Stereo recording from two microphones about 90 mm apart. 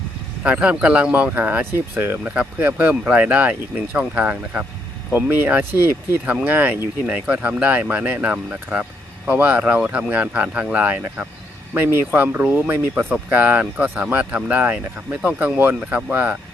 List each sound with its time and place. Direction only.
0.4 s speech: 15° right (ahead or behind)